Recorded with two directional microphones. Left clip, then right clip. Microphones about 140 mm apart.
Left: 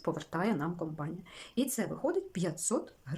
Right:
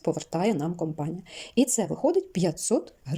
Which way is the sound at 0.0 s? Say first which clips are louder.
Right 7 dB; 20° right (ahead or behind).